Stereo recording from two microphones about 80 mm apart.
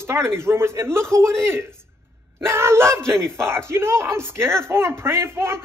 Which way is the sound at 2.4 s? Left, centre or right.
Right.